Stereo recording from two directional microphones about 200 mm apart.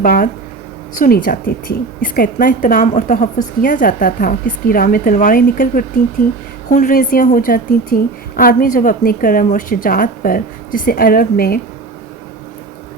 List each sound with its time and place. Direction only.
0.0 s a woman's voice: 45° left (ahead or behind)